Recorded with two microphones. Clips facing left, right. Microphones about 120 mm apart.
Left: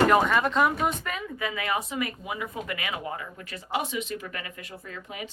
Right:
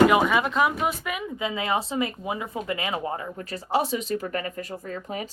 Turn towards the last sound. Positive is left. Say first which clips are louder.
# right 6 dB
turn(degrees=-40)  # may be behind; listen again after turning